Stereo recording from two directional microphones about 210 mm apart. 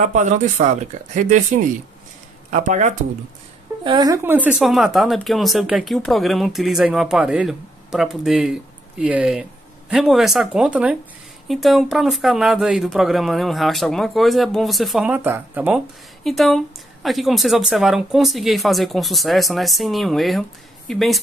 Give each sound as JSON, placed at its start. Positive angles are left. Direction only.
{"t": 0.0, "sound": "speech", "side_deg": -35}
{"t": 3.8, "sound": "speech", "side_deg": -20}